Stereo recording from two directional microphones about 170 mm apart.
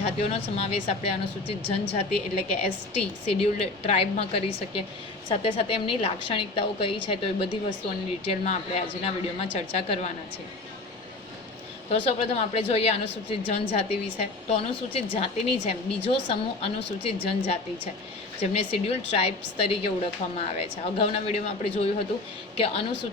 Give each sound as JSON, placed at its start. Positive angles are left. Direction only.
{"t": 0.0, "sound": "a woman's voice", "side_deg": 35}
{"t": 11.9, "sound": "a woman's voice", "side_deg": 35}